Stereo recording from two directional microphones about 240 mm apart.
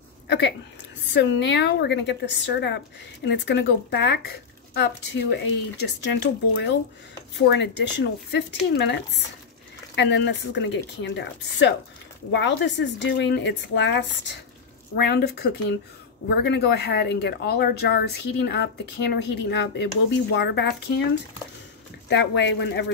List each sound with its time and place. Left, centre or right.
0.3 s speech: left
22.1 s speech: left